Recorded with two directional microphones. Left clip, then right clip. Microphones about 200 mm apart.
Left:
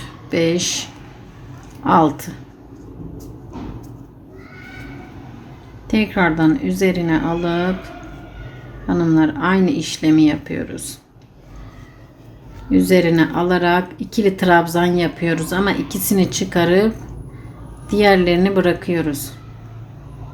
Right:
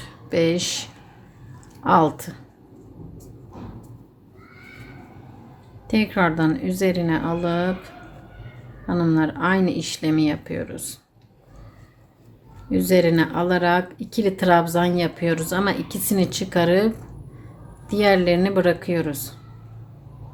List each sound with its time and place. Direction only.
0.3 s speech: 15° right (ahead or behind)
5.9 s speech: 20° right (ahead or behind)
8.9 s speech: 20° right (ahead or behind)
12.7 s speech: 15° right (ahead or behind)